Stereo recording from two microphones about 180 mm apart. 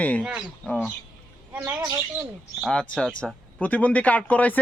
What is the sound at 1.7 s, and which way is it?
Speech, 15° right (ahead or behind).